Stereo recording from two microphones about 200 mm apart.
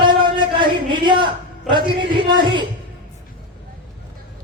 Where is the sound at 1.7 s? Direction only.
25° right (ahead or behind).